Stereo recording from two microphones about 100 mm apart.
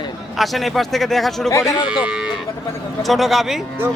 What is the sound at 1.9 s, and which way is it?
Speech, 10° right (ahead or behind).